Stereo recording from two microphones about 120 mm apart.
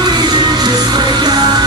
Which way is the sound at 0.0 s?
35° right (ahead or behind).